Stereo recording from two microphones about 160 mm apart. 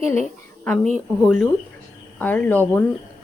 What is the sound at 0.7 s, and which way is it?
Speech, 5° left (ahead or behind).